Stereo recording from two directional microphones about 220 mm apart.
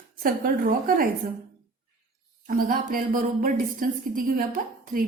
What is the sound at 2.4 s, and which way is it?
A woman's voice, 40° right (ahead or behind).